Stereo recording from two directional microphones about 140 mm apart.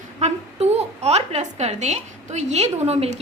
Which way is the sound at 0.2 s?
55° right (ahead or behind).